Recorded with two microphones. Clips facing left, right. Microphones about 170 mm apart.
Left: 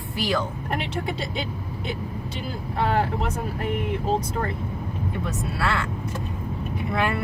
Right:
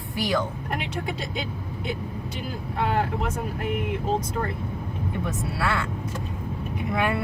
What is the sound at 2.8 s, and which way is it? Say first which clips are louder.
Speech: left 2 dB; 30° left (ahead or behind).